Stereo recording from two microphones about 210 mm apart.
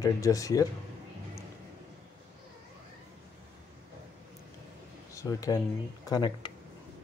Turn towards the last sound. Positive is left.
turn(degrees=20)  # may be behind; listen again after turning